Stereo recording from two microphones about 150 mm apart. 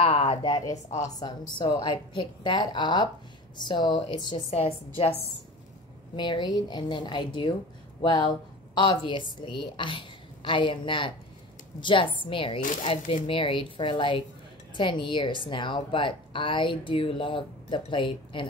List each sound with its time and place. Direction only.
0.0 s a woman's voice: 40° left (ahead or behind)
0.8 s a woman's voice: 50° left (ahead or behind)
1.2 s a woman's voice: 30° left (ahead or behind)
6.1 s a woman's voice: 30° left (ahead or behind)